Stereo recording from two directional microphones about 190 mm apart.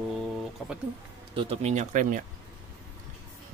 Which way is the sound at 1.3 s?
30° right (ahead or behind).